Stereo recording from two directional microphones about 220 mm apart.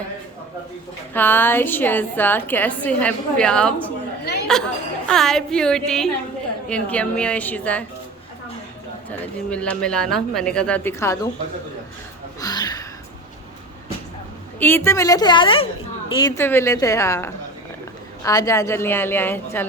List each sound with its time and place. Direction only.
1.1 s a woman's voice: 10° left (ahead or behind)
9.0 s speech: 5° left (ahead or behind)
12.4 s a sound: 15° left (ahead or behind)
14.6 s a woman's voice: 10° left (ahead or behind)